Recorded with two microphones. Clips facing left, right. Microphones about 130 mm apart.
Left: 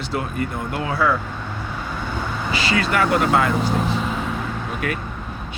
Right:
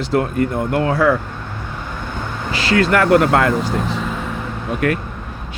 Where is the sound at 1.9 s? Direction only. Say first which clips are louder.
Even; 5° left (ahead or behind).